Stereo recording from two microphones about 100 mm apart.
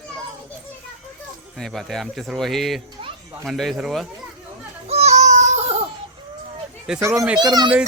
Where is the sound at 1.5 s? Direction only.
5° left (ahead or behind).